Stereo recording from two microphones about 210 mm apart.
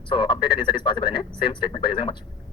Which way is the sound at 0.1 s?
25° left (ahead or behind).